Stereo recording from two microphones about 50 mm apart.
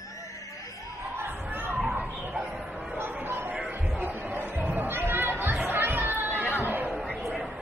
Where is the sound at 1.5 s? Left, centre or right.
Right.